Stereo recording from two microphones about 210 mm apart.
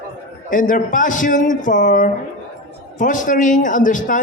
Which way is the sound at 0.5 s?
40° left (ahead or behind).